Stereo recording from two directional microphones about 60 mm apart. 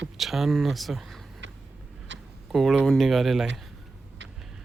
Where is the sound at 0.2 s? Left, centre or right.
Centre.